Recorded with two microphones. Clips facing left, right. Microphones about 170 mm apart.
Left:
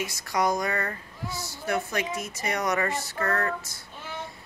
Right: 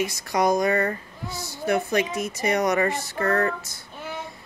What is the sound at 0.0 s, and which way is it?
Speech, 20° right (ahead or behind).